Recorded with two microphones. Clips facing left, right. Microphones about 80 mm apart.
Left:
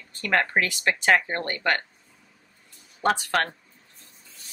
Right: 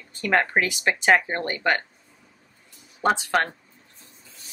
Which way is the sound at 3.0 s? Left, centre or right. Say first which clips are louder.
Right 2 dB; centre.